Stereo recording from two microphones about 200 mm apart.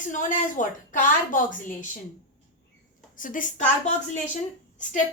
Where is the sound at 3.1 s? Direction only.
40° left (ahead or behind).